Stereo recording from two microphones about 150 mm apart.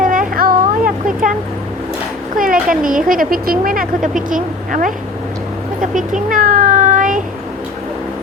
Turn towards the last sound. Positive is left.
turn(degrees=-60)  # may be behind; listen again after turning